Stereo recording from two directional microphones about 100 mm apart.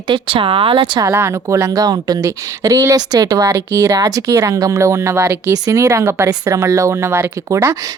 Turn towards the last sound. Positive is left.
turn(degrees=-30)  # may be behind; listen again after turning